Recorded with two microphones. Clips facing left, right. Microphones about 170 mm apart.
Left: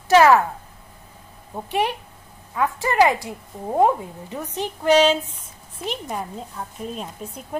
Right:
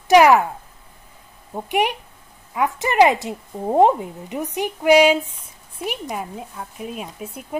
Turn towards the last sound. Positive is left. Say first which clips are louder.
# right 1 dB
turn(degrees=-10)  # may be behind; listen again after turning